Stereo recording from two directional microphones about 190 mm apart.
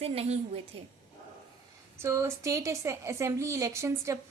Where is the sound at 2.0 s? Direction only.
15° right (ahead or behind).